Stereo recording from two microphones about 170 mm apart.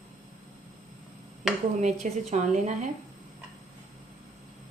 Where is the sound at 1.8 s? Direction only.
45° right (ahead or behind).